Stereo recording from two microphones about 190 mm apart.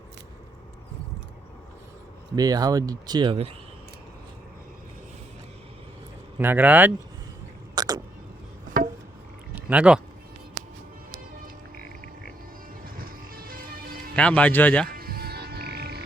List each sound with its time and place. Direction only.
2.3 s speech: 20° right (ahead or behind)
6.4 s speech: 10° right (ahead or behind)
7.8 s vehicle: 20° right (ahead or behind)
9.6 s speech: 10° right (ahead or behind)
12.8 s vehicle: 50° right (ahead or behind)
14.2 s speech: 5° left (ahead or behind)
14.9 s frog: 50° right (ahead or behind)